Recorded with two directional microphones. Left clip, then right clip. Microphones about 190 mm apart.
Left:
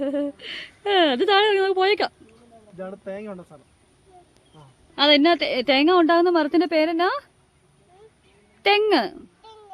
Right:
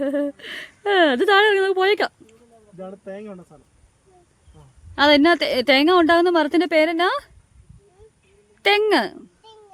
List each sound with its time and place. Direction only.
0.0 s speech: 25° right (ahead or behind)
2.7 s speech: 10° right (ahead or behind)
4.9 s a woman's voice: 30° right (ahead or behind)
8.6 s speech: 25° right (ahead or behind)